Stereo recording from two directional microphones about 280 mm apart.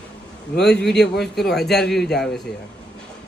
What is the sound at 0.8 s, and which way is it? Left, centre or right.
Speech, centre.